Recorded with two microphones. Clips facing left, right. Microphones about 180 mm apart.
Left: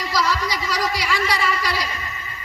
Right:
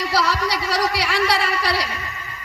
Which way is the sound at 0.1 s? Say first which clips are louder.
Even; 65° right (ahead or behind).